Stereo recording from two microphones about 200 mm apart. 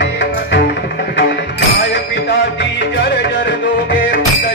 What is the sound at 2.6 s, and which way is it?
Music, 60° left (ahead or behind).